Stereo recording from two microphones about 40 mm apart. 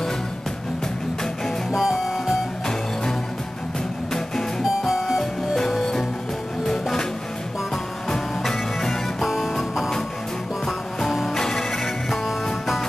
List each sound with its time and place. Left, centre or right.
1.7 s music: centre
4.1 s music: centre
4.8 s music: centre
5.8 s music: centre
9.2 s music: centre
11.3 s music: centre